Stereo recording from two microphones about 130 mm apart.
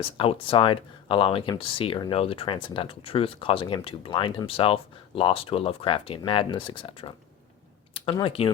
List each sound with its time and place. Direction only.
0.0 s speech: 45° left (ahead or behind)